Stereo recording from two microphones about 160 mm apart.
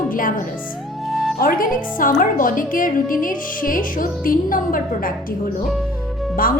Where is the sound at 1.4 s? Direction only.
60° left (ahead or behind).